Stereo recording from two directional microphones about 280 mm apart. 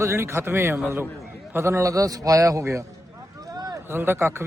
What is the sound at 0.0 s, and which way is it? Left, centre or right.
A man's voice, centre.